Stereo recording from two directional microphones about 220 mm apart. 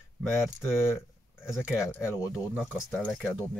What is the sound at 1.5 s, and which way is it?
Speech, 5° right (ahead or behind).